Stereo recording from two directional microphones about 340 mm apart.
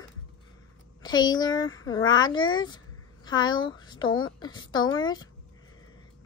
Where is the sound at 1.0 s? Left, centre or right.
Centre.